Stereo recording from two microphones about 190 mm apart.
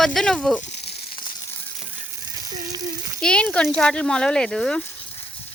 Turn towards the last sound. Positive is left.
turn(degrees=5)  # may be behind; listen again after turning